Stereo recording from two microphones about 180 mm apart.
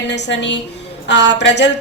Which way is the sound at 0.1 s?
85° left.